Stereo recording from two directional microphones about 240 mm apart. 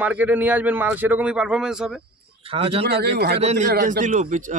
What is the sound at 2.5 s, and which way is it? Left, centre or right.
Speech, right.